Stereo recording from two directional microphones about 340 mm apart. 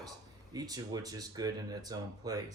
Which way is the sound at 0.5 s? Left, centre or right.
Centre.